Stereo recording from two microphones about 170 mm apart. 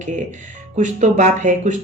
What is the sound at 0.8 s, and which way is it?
Speech, 45° right (ahead or behind).